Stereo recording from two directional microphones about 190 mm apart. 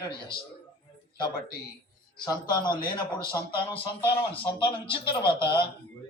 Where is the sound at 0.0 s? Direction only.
25° left (ahead or behind).